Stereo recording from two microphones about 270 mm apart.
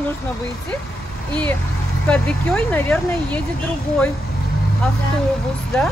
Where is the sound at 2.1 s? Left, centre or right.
Centre.